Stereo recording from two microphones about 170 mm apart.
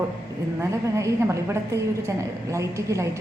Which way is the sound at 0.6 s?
15° right (ahead or behind).